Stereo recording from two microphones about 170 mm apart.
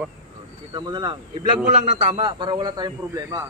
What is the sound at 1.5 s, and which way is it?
A man's voice, 40° right (ahead or behind).